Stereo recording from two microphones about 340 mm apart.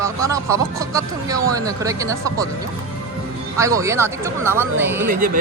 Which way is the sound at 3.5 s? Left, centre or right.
Centre.